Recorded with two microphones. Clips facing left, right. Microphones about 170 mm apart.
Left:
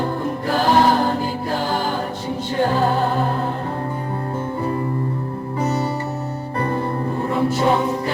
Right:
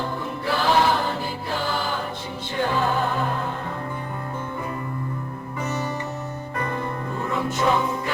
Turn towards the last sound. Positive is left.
turn(degrees=35)  # may be behind; listen again after turning